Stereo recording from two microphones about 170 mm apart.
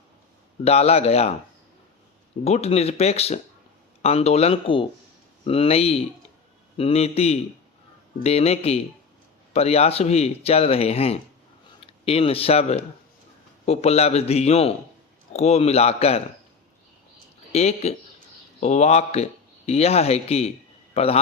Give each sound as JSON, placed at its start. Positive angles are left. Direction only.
{"t": 0.6, "sound": "speech", "side_deg": 35}
{"t": 2.4, "sound": "speech", "side_deg": 40}
{"t": 17.5, "sound": "a man's voice", "side_deg": 40}